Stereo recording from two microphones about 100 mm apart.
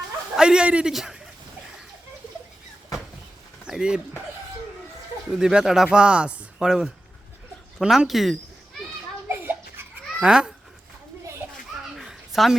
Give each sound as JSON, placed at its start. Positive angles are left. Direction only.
{"t": 0.3, "sound": "a man's voice", "side_deg": -10}
{"t": 3.7, "sound": "speech", "side_deg": -5}
{"t": 5.3, "sound": "speech", "side_deg": -10}
{"t": 9.4, "sound": "a sound", "side_deg": -20}
{"t": 10.2, "sound": "speech", "side_deg": -10}
{"t": 11.9, "sound": "a sound", "side_deg": -5}